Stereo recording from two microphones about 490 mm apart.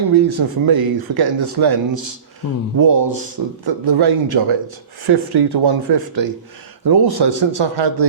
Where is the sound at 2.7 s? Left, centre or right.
Right.